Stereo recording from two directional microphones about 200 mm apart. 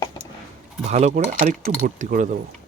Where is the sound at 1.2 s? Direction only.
45° right (ahead or behind).